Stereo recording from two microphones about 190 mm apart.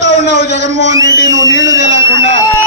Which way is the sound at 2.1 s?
70° right (ahead or behind).